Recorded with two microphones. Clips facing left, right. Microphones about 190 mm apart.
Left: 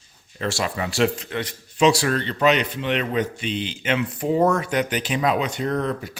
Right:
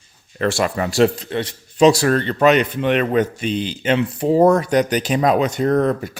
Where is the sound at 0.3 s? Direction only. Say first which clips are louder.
Right 6 dB; 55° right (ahead or behind); by 1.9 s 30° right (ahead or behind).